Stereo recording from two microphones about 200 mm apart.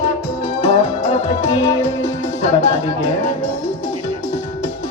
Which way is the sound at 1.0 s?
35° left (ahead or behind).